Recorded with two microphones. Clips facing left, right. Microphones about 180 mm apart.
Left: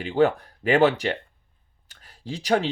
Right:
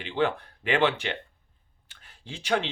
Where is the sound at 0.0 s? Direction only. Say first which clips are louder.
Left 6 dB; 40° left (ahead or behind).